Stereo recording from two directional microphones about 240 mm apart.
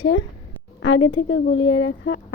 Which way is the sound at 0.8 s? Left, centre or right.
Left.